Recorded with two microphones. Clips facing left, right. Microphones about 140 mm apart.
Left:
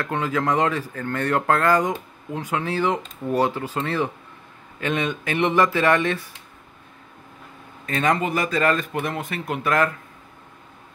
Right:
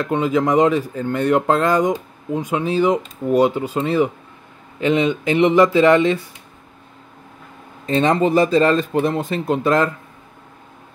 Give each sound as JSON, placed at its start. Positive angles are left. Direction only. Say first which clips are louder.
{"t": 0.0, "sound": "speech", "louder": "right 6 dB", "side_deg": -20}
{"t": 7.8, "sound": "speech", "louder": "right 6 dB", "side_deg": -25}